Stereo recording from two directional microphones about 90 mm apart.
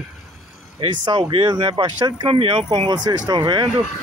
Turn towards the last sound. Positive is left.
turn(degrees=-60)  # may be behind; listen again after turning